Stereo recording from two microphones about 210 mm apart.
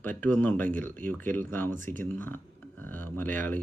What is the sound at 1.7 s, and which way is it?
Speech, 40° right (ahead or behind).